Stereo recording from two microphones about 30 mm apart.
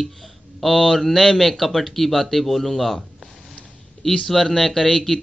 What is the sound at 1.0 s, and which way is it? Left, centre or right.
A man's voice, centre.